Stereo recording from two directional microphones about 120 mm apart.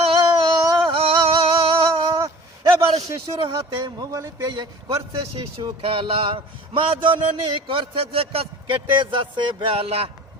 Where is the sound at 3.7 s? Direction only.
35° right (ahead or behind).